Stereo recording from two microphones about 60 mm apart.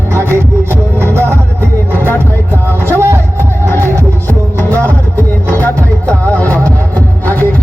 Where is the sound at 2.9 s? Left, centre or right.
Right.